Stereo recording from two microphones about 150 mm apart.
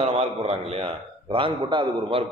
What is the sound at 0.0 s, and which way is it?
A man's voice, 40° right (ahead or behind).